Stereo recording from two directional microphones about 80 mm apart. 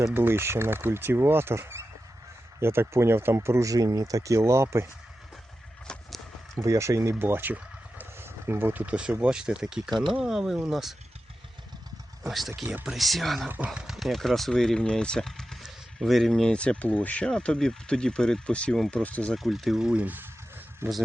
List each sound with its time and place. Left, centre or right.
0.1 s speech: right
3.7 s speech: right
5.9 s horse: centre
6.6 s speech: right; by 10.9 s centre
12.3 s speech: centre
19.4 s speech: centre; by 21.0 s right